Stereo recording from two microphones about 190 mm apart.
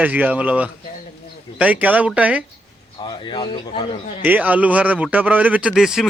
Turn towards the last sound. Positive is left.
turn(degrees=0)  # may be behind; listen again after turning